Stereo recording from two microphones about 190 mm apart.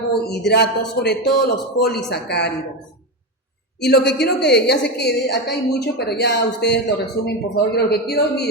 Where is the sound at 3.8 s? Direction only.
60° left (ahead or behind).